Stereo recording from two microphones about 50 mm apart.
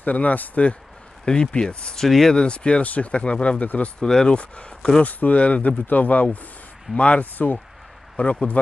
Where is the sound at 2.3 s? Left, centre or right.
Left.